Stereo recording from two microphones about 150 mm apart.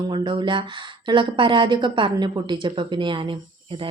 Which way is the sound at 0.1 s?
30° right (ahead or behind).